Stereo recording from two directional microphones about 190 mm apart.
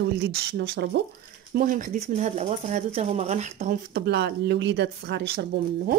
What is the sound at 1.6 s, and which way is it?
Speech, 45° right (ahead or behind).